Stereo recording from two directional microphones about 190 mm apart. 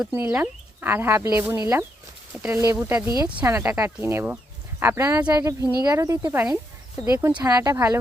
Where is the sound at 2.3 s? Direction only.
5° right (ahead or behind).